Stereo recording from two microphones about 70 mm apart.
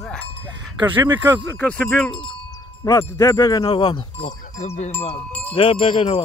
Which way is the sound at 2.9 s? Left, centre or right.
Left.